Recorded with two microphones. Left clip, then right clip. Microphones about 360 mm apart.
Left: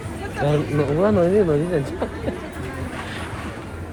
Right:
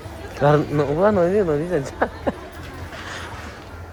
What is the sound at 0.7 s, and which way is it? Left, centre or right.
Speech, right.